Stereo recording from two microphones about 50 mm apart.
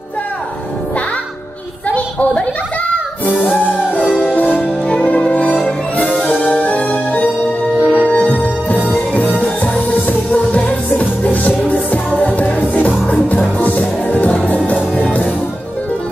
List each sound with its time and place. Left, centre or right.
4.2 s music: left